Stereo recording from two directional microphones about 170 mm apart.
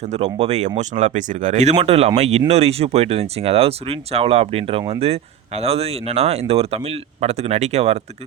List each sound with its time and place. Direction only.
0.1 s speech: 40° right (ahead or behind)